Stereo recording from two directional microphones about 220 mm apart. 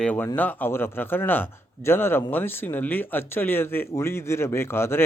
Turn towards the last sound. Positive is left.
turn(degrees=10)  # may be behind; listen again after turning